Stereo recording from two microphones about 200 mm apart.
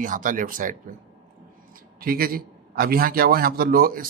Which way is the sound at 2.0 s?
50° right (ahead or behind).